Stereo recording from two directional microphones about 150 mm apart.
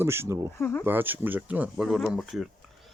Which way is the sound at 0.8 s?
15° right (ahead or behind).